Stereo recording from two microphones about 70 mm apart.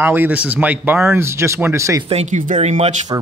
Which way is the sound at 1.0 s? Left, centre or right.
Right.